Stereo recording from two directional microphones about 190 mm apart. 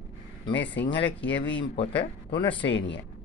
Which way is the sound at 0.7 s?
70° left (ahead or behind).